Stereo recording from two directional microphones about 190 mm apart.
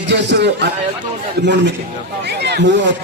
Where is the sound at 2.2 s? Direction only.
60° right (ahead or behind).